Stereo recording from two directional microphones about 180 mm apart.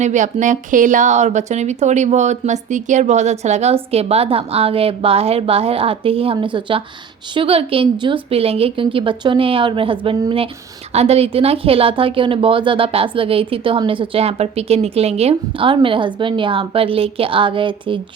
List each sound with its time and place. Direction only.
0.0 s a woman's voice: 45° right (ahead or behind)